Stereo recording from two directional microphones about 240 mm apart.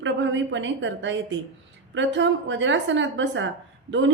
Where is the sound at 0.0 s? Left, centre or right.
Right.